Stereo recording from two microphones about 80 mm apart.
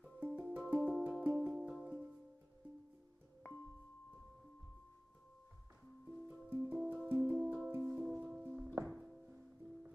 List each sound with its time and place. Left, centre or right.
0.2 s music: right
1.9 s music: right
3.4 s music: left
6.5 s music: right
6.8 s music: centre
7.1 s music: right; by 9.3 s centre